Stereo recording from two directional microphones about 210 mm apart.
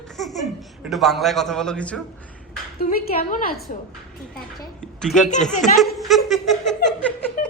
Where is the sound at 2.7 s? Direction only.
45° left (ahead or behind).